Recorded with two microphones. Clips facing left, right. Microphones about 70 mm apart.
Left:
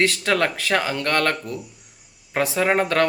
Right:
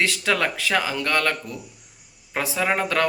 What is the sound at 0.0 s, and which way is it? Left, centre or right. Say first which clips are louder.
A man's voice: left 2 dB; left.